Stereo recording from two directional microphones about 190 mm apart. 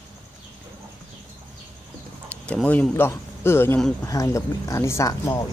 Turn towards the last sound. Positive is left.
turn(degrees=15)  # may be behind; listen again after turning